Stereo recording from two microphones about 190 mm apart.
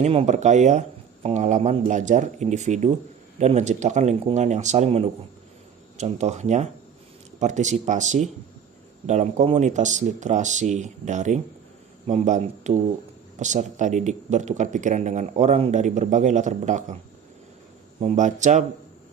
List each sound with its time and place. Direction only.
0.0 s speech: 35° right (ahead or behind)
18.0 s speech: 40° right (ahead or behind)